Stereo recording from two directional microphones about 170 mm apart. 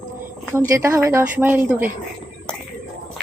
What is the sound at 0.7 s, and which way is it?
A woman's voice, 15° right (ahead or behind).